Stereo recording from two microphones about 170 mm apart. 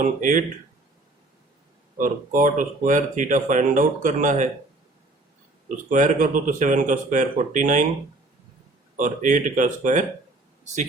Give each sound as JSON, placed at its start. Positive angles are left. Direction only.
{"t": 0.0, "sound": "speech", "side_deg": -50}
{"t": 2.0, "sound": "speech", "side_deg": -50}
{"t": 5.7, "sound": "speech", "side_deg": -50}
{"t": 9.0, "sound": "speech", "side_deg": -50}